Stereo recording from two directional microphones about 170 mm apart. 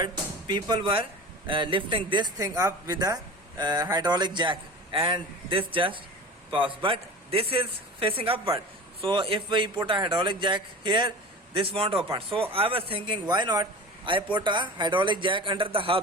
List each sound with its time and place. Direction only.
0.0 s a man's voice: 25° right (ahead or behind)